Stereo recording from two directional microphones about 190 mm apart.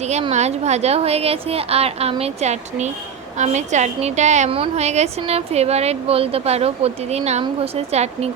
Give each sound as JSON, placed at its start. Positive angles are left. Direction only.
{"t": 0.1, "sound": "a woman's voice", "side_deg": -35}